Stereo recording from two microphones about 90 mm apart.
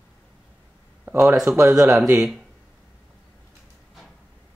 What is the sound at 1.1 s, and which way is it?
Speech, 40° right (ahead or behind).